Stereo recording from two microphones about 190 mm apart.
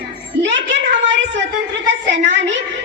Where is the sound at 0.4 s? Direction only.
70° right (ahead or behind).